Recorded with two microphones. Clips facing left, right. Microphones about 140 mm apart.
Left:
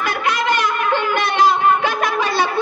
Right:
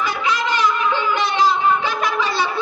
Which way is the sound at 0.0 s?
55° left (ahead or behind).